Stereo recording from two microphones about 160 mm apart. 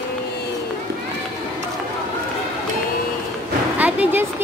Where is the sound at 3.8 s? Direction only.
10° right (ahead or behind).